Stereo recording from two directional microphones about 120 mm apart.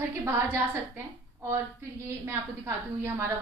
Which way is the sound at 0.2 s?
20° right (ahead or behind).